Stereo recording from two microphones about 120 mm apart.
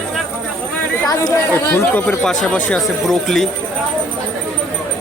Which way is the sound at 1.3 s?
20° left (ahead or behind).